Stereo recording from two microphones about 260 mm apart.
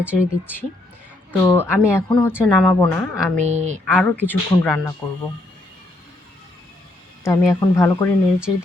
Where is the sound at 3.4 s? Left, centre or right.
Right.